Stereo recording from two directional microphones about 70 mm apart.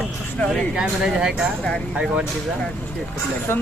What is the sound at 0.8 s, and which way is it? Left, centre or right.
Speech, centre.